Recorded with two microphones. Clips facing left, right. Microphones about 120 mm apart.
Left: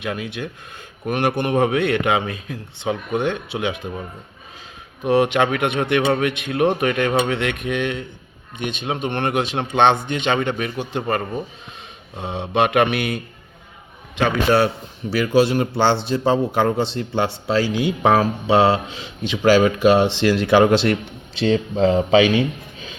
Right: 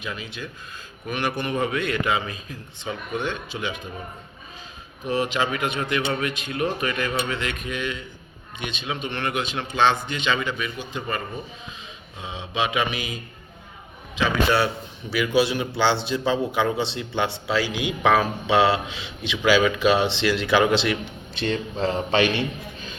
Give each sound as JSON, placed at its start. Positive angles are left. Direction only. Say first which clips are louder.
{"t": 0.0, "sound": "a man's voice", "louder": "left 7 dB", "side_deg": 65}
{"t": 5.0, "sound": "a man's voice", "louder": "left 7 dB", "side_deg": 65}
{"t": 14.2, "sound": "speech", "louder": "left 4 dB", "side_deg": 55}
{"t": 15.1, "sound": "speech", "louder": "left 5 dB", "side_deg": 40}
{"t": 21.3, "sound": "speech", "louder": "left 7 dB", "side_deg": 90}